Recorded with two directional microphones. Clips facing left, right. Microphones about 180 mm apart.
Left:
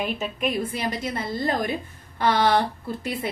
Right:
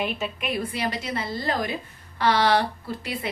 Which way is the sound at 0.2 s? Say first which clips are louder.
Left 2 dB; 45° left (ahead or behind).